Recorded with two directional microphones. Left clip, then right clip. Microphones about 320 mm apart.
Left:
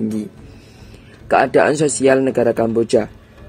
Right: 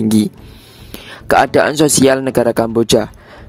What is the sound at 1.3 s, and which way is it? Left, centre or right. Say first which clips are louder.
Speech: right 2 dB; right.